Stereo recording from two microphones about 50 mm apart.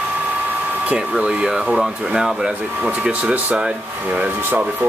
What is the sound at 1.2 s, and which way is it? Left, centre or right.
Speech, right.